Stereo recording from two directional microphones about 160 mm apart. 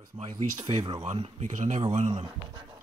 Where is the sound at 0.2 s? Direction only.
45° right (ahead or behind).